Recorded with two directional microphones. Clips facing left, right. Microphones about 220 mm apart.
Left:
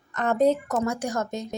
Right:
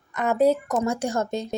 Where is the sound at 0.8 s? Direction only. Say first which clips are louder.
Right 2 dB; 25° right (ahead or behind).